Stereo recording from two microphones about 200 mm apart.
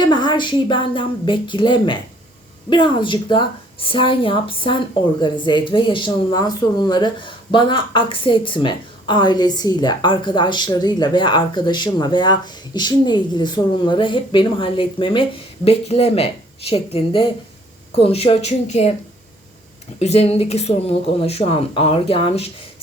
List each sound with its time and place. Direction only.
0.0 s a woman's voice: 20° left (ahead or behind)
20.0 s speech: 30° left (ahead or behind)